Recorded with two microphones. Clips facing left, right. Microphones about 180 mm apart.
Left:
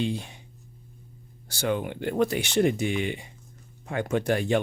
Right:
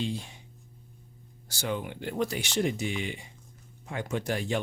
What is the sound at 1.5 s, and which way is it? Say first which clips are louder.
Speech: left 5 dB; 60° left (ahead or behind).